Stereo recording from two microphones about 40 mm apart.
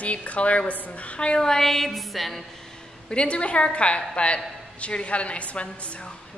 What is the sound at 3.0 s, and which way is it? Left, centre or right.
Speech, left.